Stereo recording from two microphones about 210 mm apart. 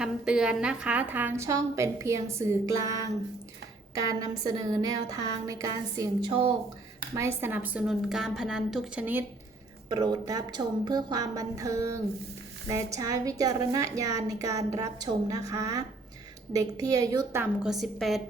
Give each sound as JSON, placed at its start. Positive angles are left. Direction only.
{"t": 0.0, "sound": "a woman's voice", "side_deg": -5}
{"t": 9.9, "sound": "a woman's voice", "side_deg": -20}
{"t": 13.0, "sound": "a woman's voice", "side_deg": -15}